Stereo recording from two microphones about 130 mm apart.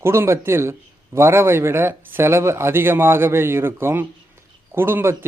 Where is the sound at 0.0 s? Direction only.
20° right (ahead or behind).